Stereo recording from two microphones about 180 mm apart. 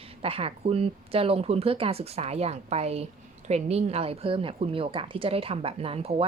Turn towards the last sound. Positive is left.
turn(degrees=-35)  # may be behind; listen again after turning